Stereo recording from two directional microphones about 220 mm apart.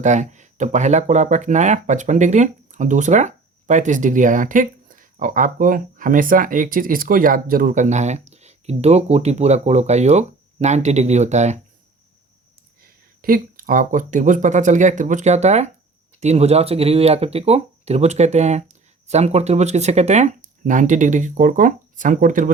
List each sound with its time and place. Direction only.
0.0 s speech: 35° right (ahead or behind)
13.2 s speech: 40° right (ahead or behind)